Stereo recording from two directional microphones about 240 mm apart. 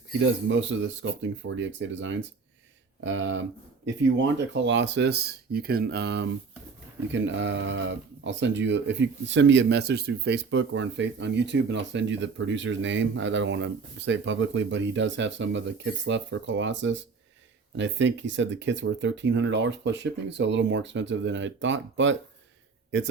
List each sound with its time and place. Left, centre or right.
0.2 s speech: right